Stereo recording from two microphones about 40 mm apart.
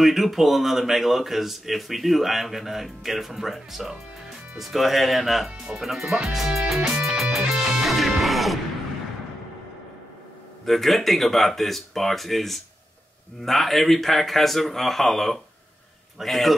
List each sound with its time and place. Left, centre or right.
0.0 s speech: centre
6.2 s music: centre
6.9 s music: centre
7.8 s music: centre
10.6 s speech: centre